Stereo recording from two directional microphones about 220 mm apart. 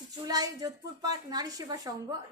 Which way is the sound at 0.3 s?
15° right (ahead or behind).